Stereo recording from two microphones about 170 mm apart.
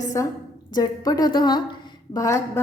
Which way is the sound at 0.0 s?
20° left (ahead or behind).